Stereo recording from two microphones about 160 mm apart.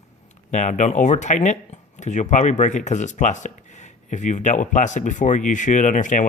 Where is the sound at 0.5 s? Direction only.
50° left (ahead or behind).